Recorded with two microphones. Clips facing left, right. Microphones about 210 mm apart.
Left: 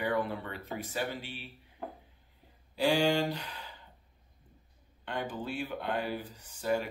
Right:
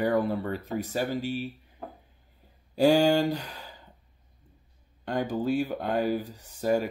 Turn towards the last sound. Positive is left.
turn(degrees=-40)  # may be behind; listen again after turning